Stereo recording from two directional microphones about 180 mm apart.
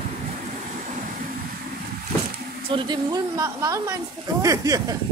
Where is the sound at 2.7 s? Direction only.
25° right (ahead or behind).